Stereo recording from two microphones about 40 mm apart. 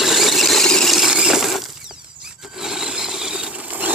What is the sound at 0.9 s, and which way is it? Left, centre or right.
Squeal, centre.